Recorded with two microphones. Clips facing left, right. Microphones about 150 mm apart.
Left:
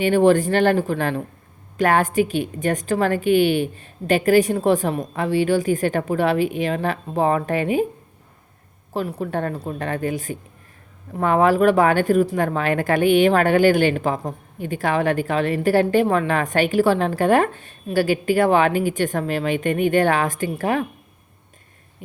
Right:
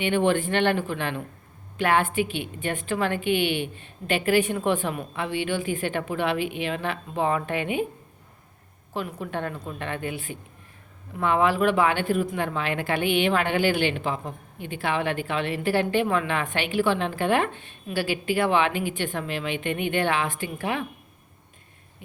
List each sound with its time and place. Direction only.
0.0 s a woman's voice: 40° left (ahead or behind)
8.9 s a woman's voice: 35° left (ahead or behind)